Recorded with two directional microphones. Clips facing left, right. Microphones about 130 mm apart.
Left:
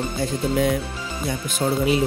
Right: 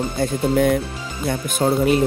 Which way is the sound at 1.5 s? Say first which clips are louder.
Right 3 dB; 50° right (ahead or behind).